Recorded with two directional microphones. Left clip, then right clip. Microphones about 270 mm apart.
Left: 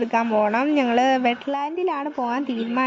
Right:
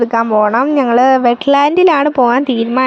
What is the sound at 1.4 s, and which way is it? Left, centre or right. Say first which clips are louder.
Speech: right 15 dB; right.